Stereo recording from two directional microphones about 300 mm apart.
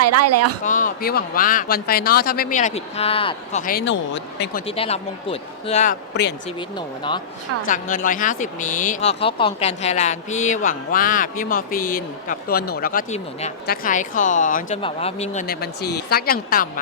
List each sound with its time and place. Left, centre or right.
0.0 s speech: right
0.6 s speech: left
4.6 s speech: centre
6.6 s speech: centre
7.7 s speech: left